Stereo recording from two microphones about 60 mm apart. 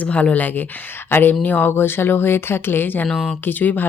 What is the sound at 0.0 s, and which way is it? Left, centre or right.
Speech, left.